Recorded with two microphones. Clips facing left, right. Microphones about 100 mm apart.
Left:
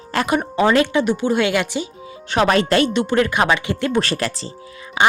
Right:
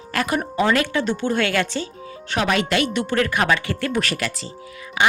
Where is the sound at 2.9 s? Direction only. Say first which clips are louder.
Left 3 dB; 20° left (ahead or behind).